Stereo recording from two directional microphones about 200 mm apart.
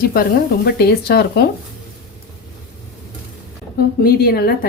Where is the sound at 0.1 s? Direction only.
50° left (ahead or behind).